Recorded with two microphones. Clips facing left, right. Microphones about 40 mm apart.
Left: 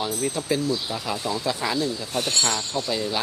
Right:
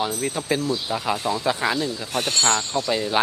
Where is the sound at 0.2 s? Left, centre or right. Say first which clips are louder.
Right 1 dB; right.